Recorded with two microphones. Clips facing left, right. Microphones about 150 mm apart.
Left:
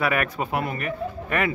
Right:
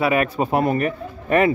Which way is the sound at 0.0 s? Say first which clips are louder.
Right 5 dB; 25° right (ahead or behind).